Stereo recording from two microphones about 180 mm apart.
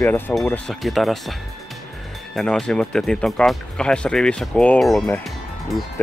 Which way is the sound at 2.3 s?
5° left (ahead or behind).